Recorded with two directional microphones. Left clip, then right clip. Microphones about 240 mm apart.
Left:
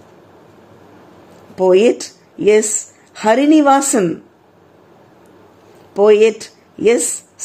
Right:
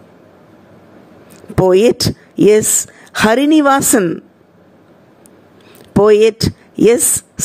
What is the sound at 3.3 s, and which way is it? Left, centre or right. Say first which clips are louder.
Speech: left 1 dB; right.